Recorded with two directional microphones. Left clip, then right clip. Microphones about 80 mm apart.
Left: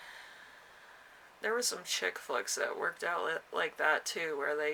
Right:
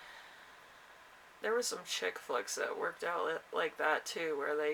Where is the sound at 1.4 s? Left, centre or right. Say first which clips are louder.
Left 1 dB; left.